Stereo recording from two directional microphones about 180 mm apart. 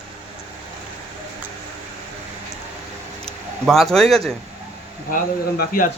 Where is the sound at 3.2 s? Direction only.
Centre (ahead or behind).